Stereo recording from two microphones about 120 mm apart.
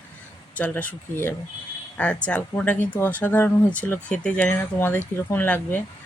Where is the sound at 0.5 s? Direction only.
10° left (ahead or behind).